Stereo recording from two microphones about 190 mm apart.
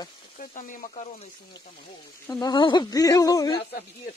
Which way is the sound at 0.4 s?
45° left (ahead or behind).